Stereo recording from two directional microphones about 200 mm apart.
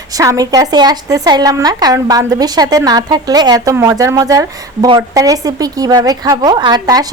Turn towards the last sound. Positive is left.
turn(degrees=-20)  # may be behind; listen again after turning